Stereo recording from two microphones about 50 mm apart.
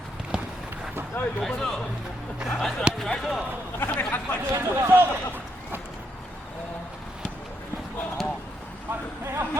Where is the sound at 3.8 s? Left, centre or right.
Left.